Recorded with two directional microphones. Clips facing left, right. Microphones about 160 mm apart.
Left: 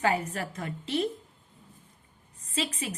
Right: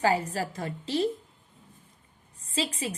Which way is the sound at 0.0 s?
30° right (ahead or behind).